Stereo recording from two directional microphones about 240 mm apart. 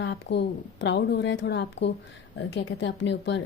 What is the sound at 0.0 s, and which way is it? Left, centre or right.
Speech, left.